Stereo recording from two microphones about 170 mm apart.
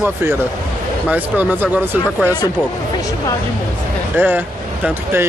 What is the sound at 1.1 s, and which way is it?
Speech, 10° right (ahead or behind).